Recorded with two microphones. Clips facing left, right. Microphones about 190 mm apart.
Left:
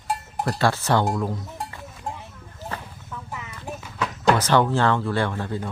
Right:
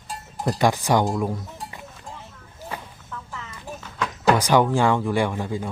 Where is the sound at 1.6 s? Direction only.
60° left (ahead or behind).